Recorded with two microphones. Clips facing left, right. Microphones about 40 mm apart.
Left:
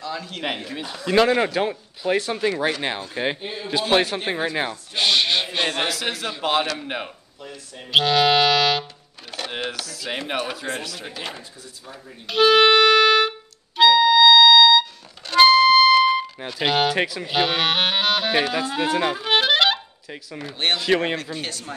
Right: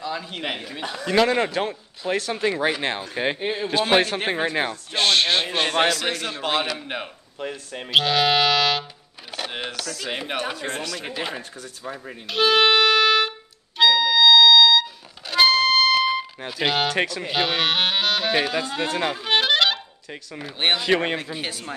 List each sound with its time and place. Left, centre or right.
0.0 s speech: centre
0.4 s speech: centre
2.5 s a man's voice: centre
3.3 s a man's voice: right
3.9 s a man's voice: centre
4.9 s a sound: centre
5.9 s speech: centre
7.3 s speech: right
7.9 s speech: centre
9.3 s music: centre
9.7 s speech: centre
12.3 s music: centre
16.5 s a man's voice: centre